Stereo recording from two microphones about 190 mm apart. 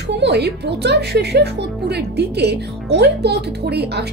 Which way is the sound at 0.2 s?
60° right (ahead or behind).